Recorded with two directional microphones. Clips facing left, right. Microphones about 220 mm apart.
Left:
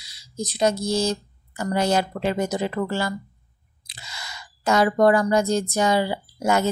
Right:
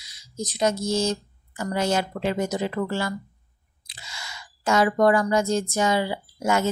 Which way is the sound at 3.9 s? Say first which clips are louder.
Left 1 dB; 35° left (ahead or behind).